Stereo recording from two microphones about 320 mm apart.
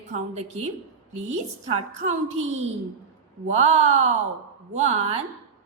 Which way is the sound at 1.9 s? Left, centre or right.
Right.